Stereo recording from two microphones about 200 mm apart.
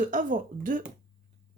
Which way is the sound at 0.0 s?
40° right (ahead or behind).